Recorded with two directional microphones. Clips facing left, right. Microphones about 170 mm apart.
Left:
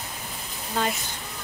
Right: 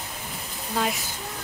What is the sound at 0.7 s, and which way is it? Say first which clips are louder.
Speech: even; 5° right (ahead or behind).